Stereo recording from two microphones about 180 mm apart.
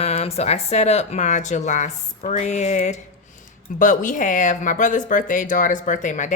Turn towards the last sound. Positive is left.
turn(degrees=45)  # may be behind; listen again after turning